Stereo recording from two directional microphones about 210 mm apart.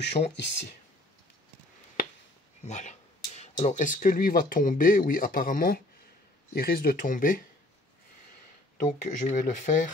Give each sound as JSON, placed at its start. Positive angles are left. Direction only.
{"t": 0.0, "sound": "speech", "side_deg": 50}
{"t": 2.6, "sound": "speech", "side_deg": 35}
{"t": 8.7, "sound": "speech", "side_deg": 35}